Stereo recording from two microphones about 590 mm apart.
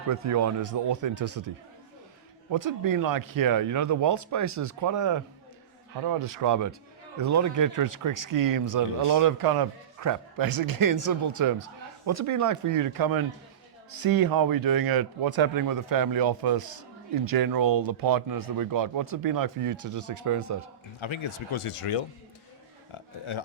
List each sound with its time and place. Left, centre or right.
0.1 s speech: right
2.5 s speech: right
21.0 s speech: left
22.9 s a sound: left